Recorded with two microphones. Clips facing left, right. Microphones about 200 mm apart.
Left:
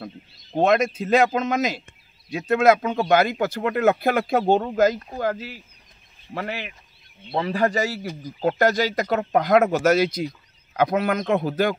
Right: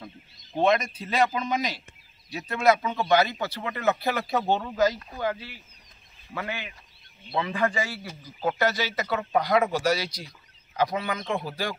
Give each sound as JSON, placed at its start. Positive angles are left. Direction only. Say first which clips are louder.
{"t": 0.6, "sound": "a man's voice", "louder": "left 4 dB", "side_deg": 45}